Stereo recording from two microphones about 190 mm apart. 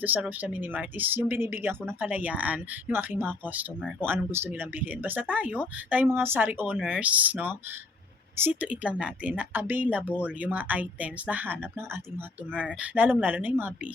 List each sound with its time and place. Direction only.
0.0 s speech: 10° right (ahead or behind)
12.8 s speech: 10° right (ahead or behind)